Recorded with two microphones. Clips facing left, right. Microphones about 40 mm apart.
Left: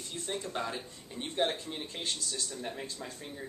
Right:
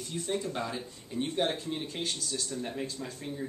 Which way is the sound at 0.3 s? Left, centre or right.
Centre.